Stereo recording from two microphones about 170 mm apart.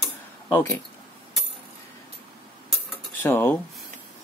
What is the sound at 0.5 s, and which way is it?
Speech, 15° left (ahead or behind).